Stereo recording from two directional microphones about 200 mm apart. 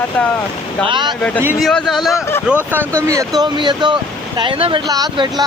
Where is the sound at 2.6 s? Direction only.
10° right (ahead or behind).